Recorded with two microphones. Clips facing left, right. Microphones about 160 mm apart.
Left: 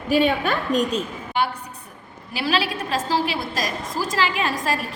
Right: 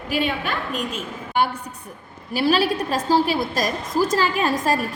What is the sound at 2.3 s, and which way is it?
A woman's voice, 45° right (ahead or behind).